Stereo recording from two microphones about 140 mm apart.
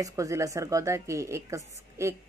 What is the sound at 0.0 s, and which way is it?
Speech, 25° right (ahead or behind).